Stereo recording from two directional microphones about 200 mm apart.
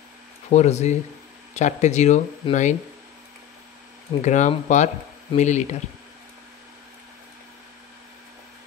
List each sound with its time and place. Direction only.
0.5 s speech: 35° left (ahead or behind)
4.2 s speech: 35° left (ahead or behind)